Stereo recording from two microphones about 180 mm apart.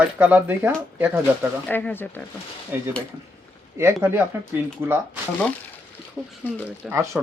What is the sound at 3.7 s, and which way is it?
Speech, 15° right (ahead or behind).